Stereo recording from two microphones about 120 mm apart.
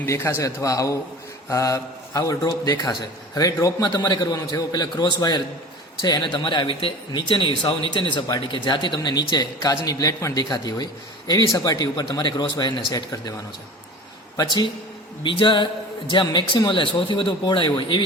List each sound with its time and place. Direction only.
0.0 s a man's voice: 20° left (ahead or behind); by 12.8 s 35° left (ahead or behind)
14.3 s a man's voice: 35° left (ahead or behind)